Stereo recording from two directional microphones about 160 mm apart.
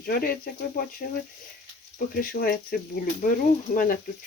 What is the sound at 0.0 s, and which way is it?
Speech, 70° left (ahead or behind).